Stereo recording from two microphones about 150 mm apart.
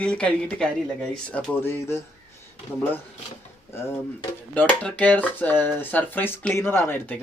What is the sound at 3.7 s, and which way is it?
Speech, 15° left (ahead or behind).